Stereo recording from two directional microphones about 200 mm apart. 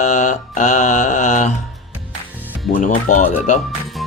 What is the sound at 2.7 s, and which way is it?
Music, 40° left (ahead or behind).